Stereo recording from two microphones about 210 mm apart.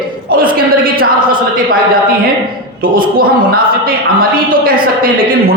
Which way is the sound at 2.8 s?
45° right (ahead or behind).